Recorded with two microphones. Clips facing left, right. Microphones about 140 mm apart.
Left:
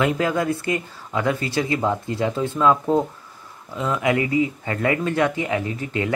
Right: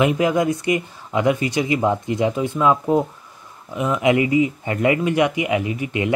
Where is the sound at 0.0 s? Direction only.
15° right (ahead or behind).